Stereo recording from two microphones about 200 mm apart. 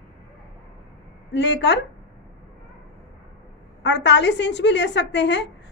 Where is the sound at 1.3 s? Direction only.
60° left (ahead or behind).